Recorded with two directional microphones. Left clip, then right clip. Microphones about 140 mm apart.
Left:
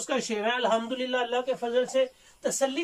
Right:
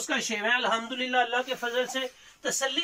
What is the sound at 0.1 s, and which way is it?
Speech, 15° left (ahead or behind).